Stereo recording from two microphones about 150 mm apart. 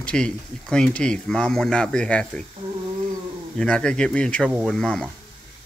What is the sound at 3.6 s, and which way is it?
A man's voice, 5° left (ahead or behind).